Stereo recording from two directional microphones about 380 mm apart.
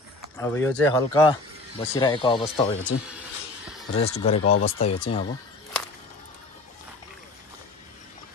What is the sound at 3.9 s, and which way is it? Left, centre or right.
Speech, centre.